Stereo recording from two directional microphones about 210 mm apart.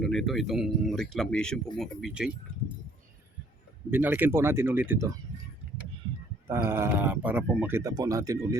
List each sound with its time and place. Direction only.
0.0 s speech: centre (ahead or behind)
3.9 s speech: 10° right (ahead or behind)
6.5 s speech: 10° right (ahead or behind)